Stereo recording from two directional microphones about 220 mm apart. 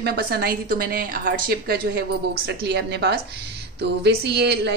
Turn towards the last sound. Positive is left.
turn(degrees=-50)  # may be behind; listen again after turning